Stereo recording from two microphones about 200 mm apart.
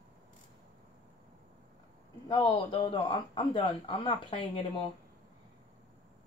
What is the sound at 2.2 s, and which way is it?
Speech, 20° left (ahead or behind).